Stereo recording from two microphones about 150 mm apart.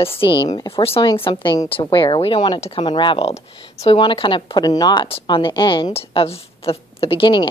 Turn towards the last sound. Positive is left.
turn(degrees=35)  # may be behind; listen again after turning